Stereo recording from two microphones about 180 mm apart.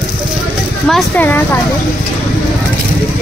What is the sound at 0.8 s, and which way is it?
Speech, 5° left (ahead or behind).